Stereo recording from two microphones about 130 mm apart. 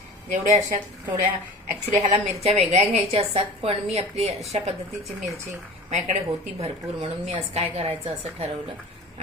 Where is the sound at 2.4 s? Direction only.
55° right (ahead or behind).